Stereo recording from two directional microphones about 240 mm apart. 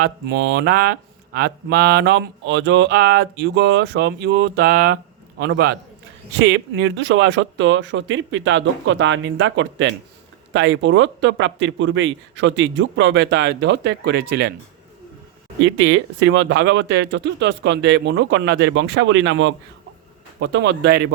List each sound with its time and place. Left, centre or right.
0.0 s speech: right
15.6 s speech: right